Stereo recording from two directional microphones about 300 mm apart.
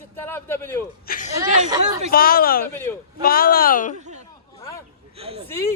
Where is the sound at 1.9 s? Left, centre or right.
Right.